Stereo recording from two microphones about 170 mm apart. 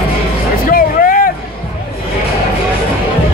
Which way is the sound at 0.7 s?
55° left (ahead or behind).